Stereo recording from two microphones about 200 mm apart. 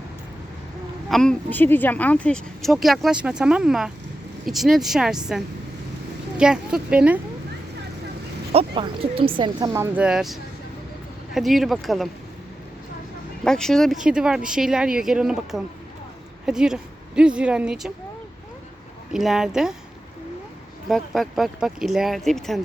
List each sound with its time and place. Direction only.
1.1 s speech: 5° left (ahead or behind)
6.3 s speech: 5° right (ahead or behind)
8.5 s speech: 25° right (ahead or behind); by 12.0 s centre (ahead or behind)
13.4 s speech: 5° left (ahead or behind)
19.1 s speech: centre (ahead or behind)
20.8 s speech: centre (ahead or behind)